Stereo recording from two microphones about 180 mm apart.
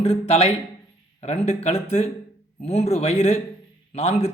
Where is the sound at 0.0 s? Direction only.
35° left (ahead or behind).